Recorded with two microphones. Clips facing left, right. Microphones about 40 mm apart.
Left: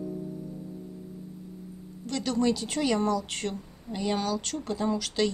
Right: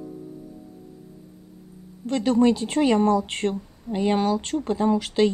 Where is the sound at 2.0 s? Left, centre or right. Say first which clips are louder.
Right 7 dB; right.